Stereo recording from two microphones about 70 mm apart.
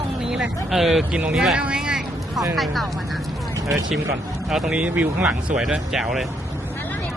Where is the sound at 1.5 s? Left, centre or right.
Centre.